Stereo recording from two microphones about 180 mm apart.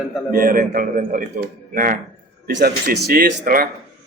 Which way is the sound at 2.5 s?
60° right (ahead or behind).